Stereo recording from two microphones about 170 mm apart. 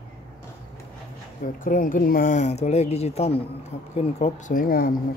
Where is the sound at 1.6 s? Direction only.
50° left (ahead or behind).